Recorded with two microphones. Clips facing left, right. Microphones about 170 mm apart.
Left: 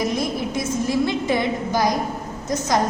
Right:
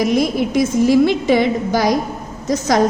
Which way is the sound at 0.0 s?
80° right.